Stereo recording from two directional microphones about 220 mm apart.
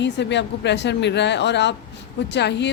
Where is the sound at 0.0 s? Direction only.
55° left (ahead or behind).